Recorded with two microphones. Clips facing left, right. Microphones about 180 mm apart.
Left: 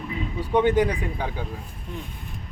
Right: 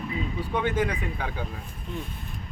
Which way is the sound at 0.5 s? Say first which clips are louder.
Left 7 dB; 15° left (ahead or behind).